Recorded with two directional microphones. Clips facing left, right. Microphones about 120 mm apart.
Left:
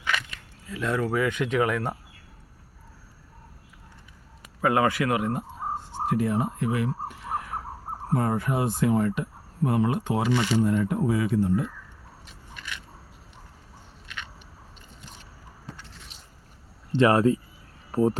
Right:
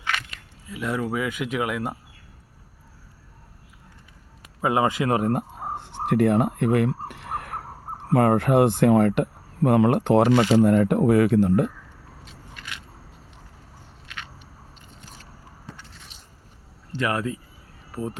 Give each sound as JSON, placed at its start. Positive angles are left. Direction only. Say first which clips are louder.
{"t": 0.7, "sound": "speech", "louder": "even", "side_deg": -10}
{"t": 4.6, "sound": "speech", "louder": "right 1 dB", "side_deg": -20}
{"t": 5.3, "sound": "fowl", "louder": "right 4 dB", "side_deg": -65}
{"t": 8.1, "sound": "speech", "louder": "right 8 dB", "side_deg": -70}
{"t": 16.9, "sound": "speech", "louder": "left 7 dB", "side_deg": 25}